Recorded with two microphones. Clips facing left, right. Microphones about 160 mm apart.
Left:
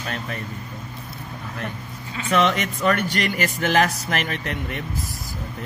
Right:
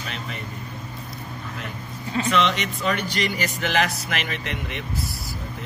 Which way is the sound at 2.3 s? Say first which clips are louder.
Left 5 dB; 45° left (ahead or behind).